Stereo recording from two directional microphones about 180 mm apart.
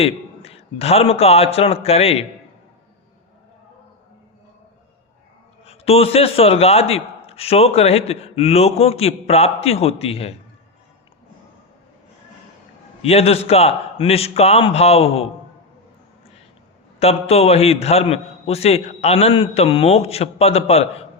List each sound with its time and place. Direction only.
0.0 s a man's voice: 35° left (ahead or behind)
5.6 s a man's voice: 35° left (ahead or behind)
13.0 s a man's voice: 35° left (ahead or behind)
17.0 s a man's voice: 35° left (ahead or behind)